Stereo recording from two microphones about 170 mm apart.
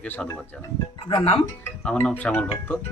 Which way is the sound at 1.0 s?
30° left (ahead or behind).